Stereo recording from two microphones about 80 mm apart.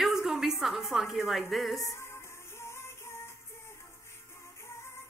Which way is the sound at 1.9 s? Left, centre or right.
Left.